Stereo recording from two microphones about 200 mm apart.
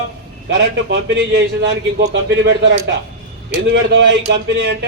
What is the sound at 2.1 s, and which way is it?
A man's voice, 65° right (ahead or behind).